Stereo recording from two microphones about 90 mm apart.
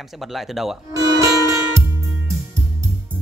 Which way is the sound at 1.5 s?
35° right (ahead or behind).